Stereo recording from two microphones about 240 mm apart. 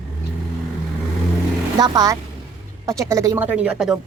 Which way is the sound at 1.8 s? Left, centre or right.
Centre.